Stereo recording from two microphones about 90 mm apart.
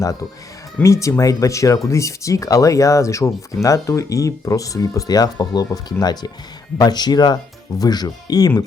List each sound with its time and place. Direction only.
0.8 s speech: 35° left (ahead or behind)